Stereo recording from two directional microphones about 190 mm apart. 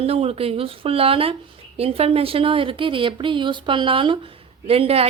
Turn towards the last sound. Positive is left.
turn(degrees=-30)  # may be behind; listen again after turning